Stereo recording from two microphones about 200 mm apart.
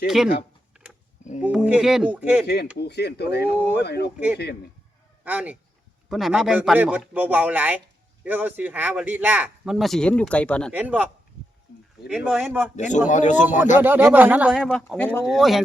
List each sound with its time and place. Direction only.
1.4 s a man's voice: 5° right (ahead or behind)
2.7 s speech: 55° left (ahead or behind)
3.5 s speech: 10° right (ahead or behind)
3.8 s speech: 55° left (ahead or behind)
5.2 s speech: 10° right (ahead or behind)
10.7 s a man's voice: 5° right (ahead or behind)
12.7 s speech: 40° left (ahead or behind)
13.7 s a man's voice: 10° right (ahead or behind); by 15.3 s 10° left (ahead or behind)
15.3 s a man's voice: centre (ahead or behind)